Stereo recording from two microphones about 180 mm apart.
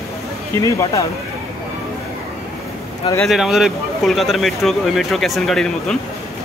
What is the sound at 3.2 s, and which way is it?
Speech, centre (ahead or behind).